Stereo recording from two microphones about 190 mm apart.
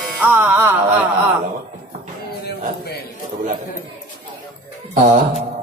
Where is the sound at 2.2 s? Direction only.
55° left (ahead or behind).